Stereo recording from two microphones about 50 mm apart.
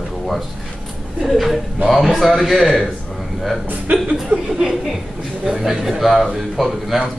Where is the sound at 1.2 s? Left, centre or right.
Centre.